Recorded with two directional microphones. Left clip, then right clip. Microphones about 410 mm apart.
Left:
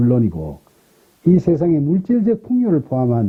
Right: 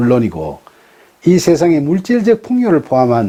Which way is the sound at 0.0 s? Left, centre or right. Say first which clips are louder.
Right 5 dB; centre.